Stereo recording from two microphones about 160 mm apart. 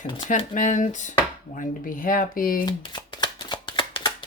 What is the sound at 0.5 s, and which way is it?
Speech, 50° left (ahead or behind).